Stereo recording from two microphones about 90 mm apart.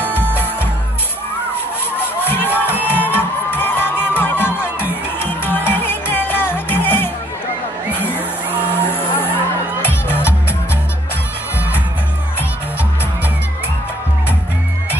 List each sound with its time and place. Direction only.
0.0 s music: 20° left (ahead or behind)
7.9 s a sound: 20° left (ahead or behind)
8.6 s vehicle: 20° left (ahead or behind)
9.8 s music: 25° left (ahead or behind)